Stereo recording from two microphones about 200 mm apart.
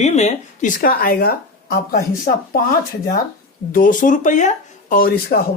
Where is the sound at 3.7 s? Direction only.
45° left (ahead or behind).